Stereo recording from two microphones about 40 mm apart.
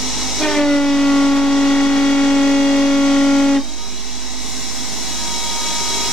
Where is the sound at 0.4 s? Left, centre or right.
Centre.